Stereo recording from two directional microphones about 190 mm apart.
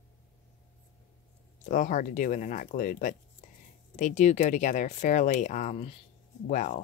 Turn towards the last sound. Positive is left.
turn(degrees=40)  # may be behind; listen again after turning